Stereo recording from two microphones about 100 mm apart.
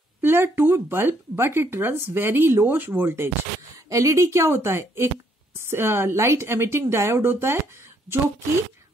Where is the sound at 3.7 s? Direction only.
35° right (ahead or behind).